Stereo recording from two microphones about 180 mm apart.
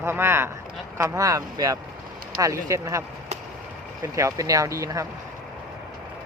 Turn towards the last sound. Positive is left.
turn(degrees=-15)  # may be behind; listen again after turning